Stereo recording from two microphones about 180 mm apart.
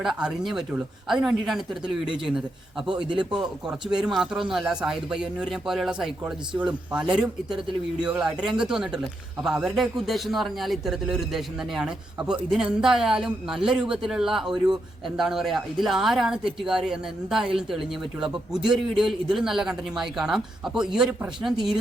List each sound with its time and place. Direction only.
0.0 s a man's voice: 5° right (ahead or behind)
3.1 s a man's voice: 25° right (ahead or behind)
3.7 s a man's voice: 5° right (ahead or behind)